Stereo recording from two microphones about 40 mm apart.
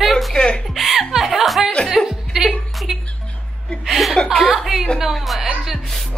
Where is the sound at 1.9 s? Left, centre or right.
Centre.